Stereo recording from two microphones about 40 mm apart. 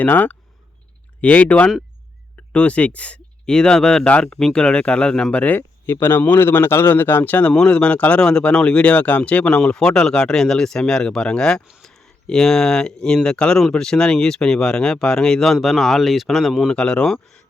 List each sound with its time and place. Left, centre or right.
0.0 s speech: left
1.2 s speech: left
3.4 s speech: centre
5.5 s speech: left
7.7 s speech: left
9.5 s speech: centre
11.8 s speech: centre
15.5 s speech: centre
16.6 s speech: left